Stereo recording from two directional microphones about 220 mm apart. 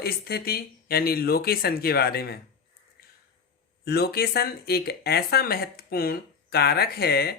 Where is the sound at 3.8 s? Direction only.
45° left (ahead or behind).